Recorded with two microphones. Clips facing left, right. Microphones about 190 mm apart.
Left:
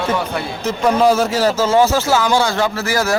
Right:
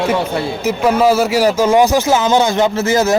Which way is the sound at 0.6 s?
5° right (ahead or behind).